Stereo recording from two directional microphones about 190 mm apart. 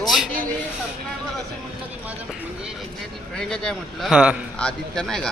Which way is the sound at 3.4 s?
5° left (ahead or behind).